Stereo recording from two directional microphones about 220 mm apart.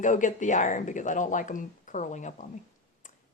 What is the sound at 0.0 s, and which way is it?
A woman's voice, 35° left (ahead or behind).